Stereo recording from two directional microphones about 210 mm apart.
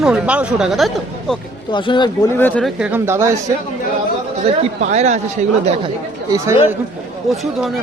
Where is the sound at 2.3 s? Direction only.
10° left (ahead or behind).